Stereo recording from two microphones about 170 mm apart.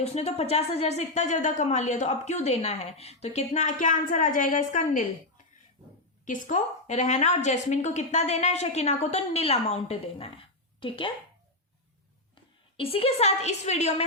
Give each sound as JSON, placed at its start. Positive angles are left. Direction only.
{"t": 0.0, "sound": "a woman's voice", "side_deg": 40}
{"t": 6.2, "sound": "a woman's voice", "side_deg": 50}
{"t": 12.7, "sound": "a woman's voice", "side_deg": 35}